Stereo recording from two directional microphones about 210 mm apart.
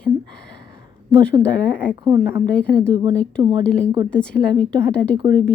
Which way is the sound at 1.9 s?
15° right (ahead or behind).